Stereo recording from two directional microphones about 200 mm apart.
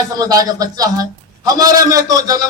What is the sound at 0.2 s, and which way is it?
A man's voice, 15° right (ahead or behind).